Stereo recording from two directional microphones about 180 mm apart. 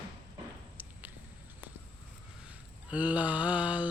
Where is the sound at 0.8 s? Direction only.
10° right (ahead or behind).